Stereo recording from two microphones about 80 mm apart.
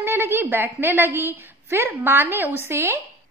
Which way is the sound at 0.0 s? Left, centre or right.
Right.